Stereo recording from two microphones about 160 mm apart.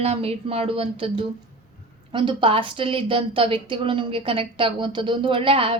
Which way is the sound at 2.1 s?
30° right (ahead or behind).